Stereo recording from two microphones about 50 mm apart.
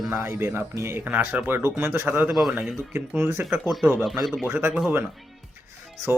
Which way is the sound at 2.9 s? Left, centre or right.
Right.